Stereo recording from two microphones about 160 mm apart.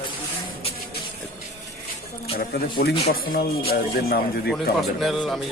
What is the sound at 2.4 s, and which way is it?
Speech, 75° left (ahead or behind).